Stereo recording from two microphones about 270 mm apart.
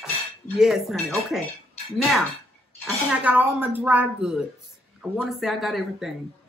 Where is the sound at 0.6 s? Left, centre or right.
Centre.